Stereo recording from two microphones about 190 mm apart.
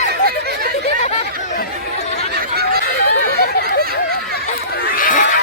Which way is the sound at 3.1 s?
60° left (ahead or behind).